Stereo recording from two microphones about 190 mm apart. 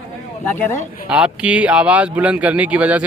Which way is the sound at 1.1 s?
5° right (ahead or behind).